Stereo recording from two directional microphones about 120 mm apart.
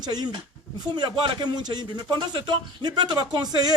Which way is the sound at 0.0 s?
35° right (ahead or behind).